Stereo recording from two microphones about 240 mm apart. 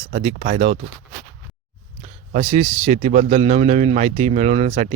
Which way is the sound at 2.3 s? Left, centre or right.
Right.